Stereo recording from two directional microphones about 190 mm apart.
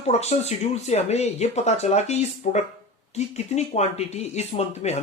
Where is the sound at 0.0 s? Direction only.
35° left (ahead or behind).